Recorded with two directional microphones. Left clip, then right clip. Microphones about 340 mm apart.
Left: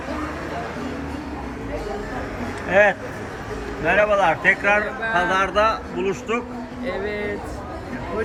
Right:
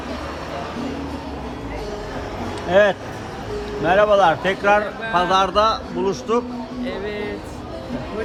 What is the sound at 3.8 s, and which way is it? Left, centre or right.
A man's voice, centre.